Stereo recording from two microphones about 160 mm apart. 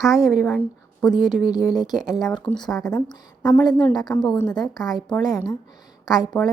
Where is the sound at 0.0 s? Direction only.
20° left (ahead or behind).